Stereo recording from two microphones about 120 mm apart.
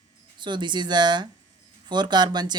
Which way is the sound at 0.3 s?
40° right (ahead or behind).